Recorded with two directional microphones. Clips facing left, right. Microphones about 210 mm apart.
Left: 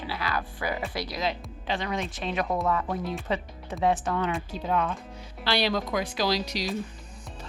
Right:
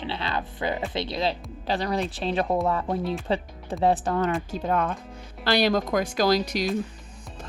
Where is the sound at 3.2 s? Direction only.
30° right (ahead or behind).